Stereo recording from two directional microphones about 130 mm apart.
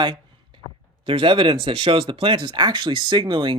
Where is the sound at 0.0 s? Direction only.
40° right (ahead or behind).